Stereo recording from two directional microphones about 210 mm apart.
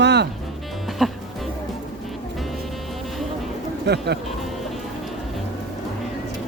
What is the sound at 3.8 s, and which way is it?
Speech, 50° right (ahead or behind).